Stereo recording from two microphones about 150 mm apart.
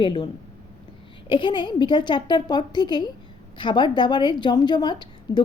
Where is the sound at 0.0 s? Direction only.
30° left (ahead or behind).